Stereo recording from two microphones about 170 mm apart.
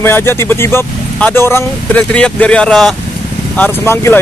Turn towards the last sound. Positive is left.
turn(degrees=15)  # may be behind; listen again after turning